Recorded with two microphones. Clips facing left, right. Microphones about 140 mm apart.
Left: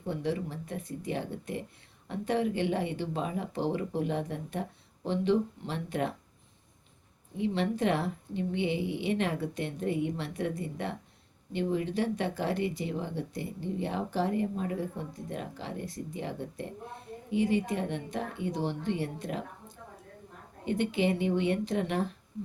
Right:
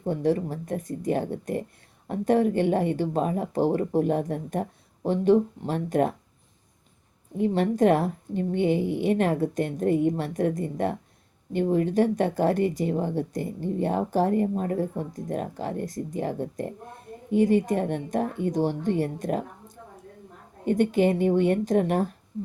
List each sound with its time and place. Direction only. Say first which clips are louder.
0.0 s speech: right 8 dB; 45° right (ahead or behind)
7.3 s speech: right 7 dB; 45° right (ahead or behind)